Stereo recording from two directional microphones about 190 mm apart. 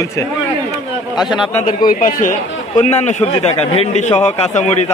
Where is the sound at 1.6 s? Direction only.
45° left (ahead or behind).